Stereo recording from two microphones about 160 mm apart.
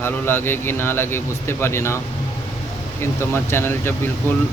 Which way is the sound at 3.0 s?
15° left (ahead or behind).